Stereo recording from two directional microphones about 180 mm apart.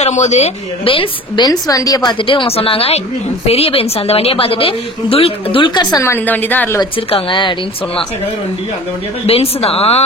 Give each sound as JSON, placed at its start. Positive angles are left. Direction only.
{"t": 0.0, "sound": "a woman's voice", "side_deg": 40}
{"t": 6.8, "sound": "a woman's voice", "side_deg": 30}
{"t": 9.2, "sound": "a woman's voice", "side_deg": 35}